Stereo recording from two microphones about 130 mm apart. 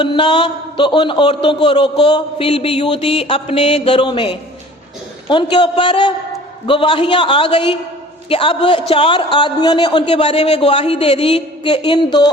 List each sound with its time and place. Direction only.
0.0 s a man's voice: 40° left (ahead or behind)